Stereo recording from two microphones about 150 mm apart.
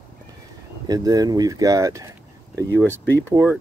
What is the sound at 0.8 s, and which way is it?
Speech, 25° right (ahead or behind).